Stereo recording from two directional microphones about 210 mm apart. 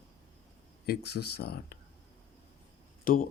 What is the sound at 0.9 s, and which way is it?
Speech, 50° left (ahead or behind).